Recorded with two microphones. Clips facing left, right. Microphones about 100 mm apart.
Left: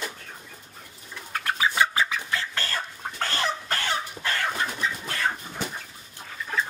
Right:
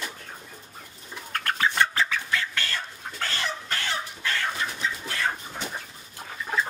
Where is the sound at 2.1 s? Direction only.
25° left (ahead or behind).